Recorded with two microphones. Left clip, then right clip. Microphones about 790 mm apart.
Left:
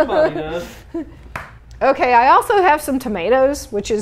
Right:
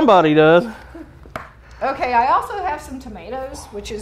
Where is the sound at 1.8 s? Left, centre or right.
Left.